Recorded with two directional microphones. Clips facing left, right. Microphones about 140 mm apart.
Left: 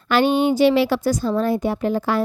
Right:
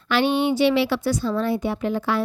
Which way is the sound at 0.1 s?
45° left (ahead or behind).